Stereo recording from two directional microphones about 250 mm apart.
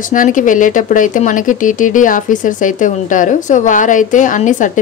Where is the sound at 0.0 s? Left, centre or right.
Left.